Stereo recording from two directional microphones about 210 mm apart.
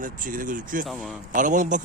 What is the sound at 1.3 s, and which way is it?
Speech, 40° right (ahead or behind).